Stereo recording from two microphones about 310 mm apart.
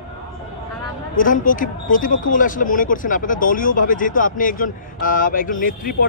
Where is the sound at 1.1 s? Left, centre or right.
Left.